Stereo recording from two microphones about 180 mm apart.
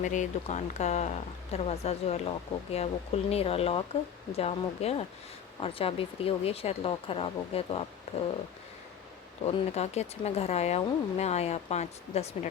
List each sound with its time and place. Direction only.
0.0 s speech: 45° left (ahead or behind)
9.4 s speech: 35° left (ahead or behind)